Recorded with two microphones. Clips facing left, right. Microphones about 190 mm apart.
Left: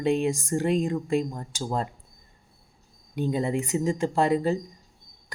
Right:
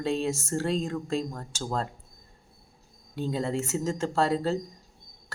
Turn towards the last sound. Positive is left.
turn(degrees=15)  # may be behind; listen again after turning